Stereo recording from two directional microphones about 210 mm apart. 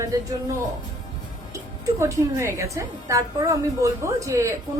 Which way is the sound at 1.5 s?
15° right (ahead or behind).